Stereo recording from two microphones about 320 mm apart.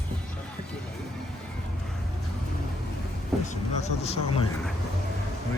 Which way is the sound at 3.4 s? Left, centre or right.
Left.